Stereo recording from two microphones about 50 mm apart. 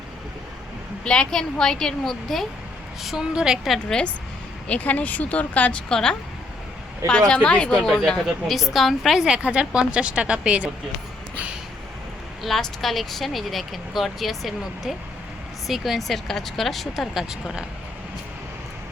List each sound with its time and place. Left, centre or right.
1.0 s a woman's voice: centre
3.0 s a woman's voice: centre
4.7 s speech: left
5.9 s a woman's voice: centre
7.8 s a woman's voice: centre
8.4 s speech: centre
9.4 s speech: right
12.4 s speech: centre